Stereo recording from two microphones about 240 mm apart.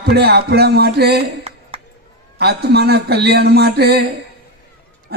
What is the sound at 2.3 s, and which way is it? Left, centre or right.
A man's voice, right.